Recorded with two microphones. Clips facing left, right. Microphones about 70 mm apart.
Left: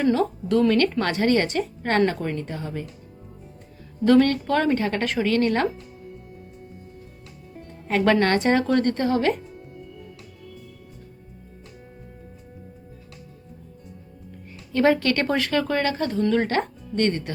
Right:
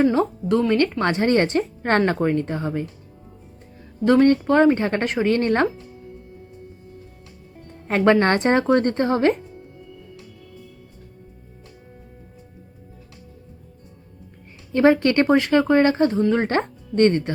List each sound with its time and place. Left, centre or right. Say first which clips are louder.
0.0 s a woman's voice: right 3 dB; right
4.0 s a woman's voice: right 2 dB; right
7.9 s a woman's voice: right 3 dB; right
14.7 s a woman's voice: right 3 dB; right